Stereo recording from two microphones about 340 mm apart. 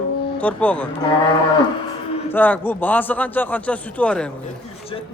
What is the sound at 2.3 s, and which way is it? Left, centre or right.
Speech, centre.